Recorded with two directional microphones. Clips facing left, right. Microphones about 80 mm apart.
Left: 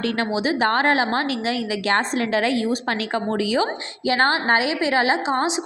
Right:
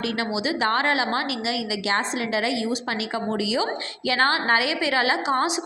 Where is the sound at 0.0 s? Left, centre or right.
Left.